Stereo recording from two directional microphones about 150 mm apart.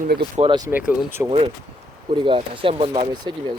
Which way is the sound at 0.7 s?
10° right (ahead or behind).